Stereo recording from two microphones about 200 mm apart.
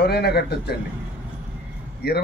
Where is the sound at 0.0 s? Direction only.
55° left (ahead or behind).